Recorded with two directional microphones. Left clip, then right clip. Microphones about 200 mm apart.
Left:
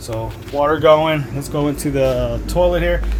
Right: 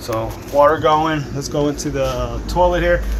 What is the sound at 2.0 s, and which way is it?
Speech, 40° left (ahead or behind).